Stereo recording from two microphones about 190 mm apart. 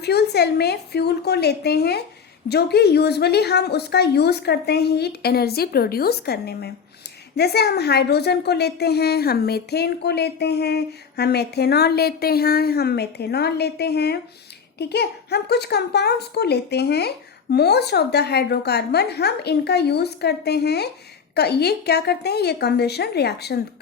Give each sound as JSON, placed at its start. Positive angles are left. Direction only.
{"t": 0.0, "sound": "a woman's voice", "side_deg": 60}